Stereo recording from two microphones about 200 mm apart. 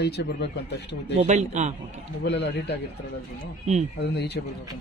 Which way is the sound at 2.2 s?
60° left (ahead or behind).